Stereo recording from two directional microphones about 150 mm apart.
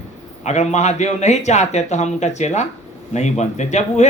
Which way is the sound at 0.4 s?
50° left (ahead or behind).